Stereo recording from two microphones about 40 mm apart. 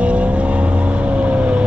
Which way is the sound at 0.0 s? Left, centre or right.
Right.